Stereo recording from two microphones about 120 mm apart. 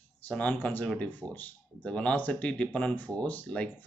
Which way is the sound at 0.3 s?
10° left (ahead or behind).